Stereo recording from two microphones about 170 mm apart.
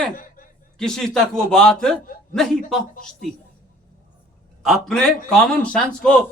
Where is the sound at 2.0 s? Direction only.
55° left (ahead or behind).